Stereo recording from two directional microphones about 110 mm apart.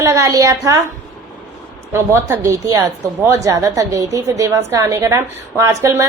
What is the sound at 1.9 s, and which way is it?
A woman's voice, 25° right (ahead or behind).